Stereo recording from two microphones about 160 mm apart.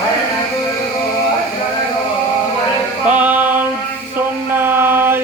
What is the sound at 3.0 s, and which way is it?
Music, 10° right (ahead or behind).